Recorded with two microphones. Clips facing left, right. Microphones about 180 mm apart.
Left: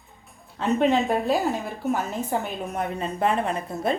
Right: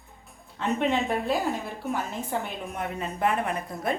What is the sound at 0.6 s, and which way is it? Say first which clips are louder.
A woman's voice: left 5 dB; 35° left (ahead or behind).